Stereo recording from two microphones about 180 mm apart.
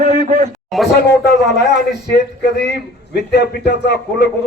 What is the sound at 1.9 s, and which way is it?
A man's voice, 70° left (ahead or behind).